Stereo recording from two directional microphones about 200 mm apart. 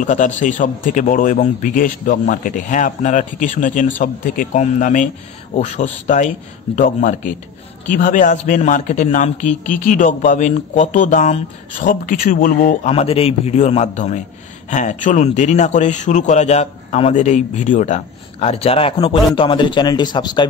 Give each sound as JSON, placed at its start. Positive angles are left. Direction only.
{"t": 0.0, "sound": "a man's voice", "side_deg": 40}